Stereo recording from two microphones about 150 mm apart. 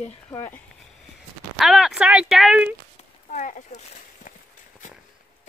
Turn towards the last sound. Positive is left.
turn(degrees=55)  # may be behind; listen again after turning